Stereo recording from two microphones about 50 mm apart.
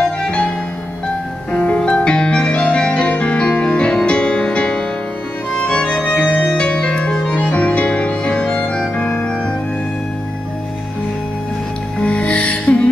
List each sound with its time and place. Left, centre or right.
1.5 s music: left
12.0 s music: left